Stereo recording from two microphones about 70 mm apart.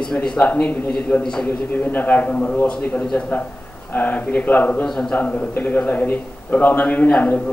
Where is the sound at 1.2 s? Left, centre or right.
Centre.